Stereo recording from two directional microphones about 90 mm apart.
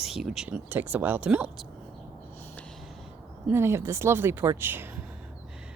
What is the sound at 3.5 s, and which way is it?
Speech, 30° right (ahead or behind).